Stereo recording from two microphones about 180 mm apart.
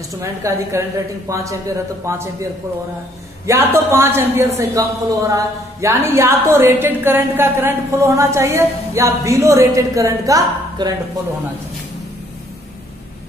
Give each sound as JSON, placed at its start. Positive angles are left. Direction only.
{"t": 0.2, "sound": "speech", "side_deg": -15}
{"t": 3.4, "sound": "speech", "side_deg": -15}